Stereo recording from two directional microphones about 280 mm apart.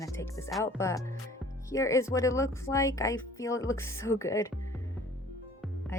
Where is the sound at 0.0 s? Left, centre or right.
Centre.